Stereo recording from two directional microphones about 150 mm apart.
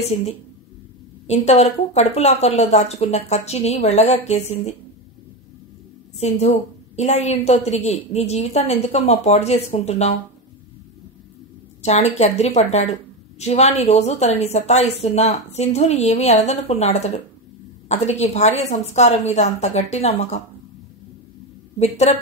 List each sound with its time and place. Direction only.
0.0 s a woman's voice: 40° left (ahead or behind)
6.1 s speech: 45° left (ahead or behind)
11.8 s speech: 45° left (ahead or behind)
21.7 s speech: 45° left (ahead or behind)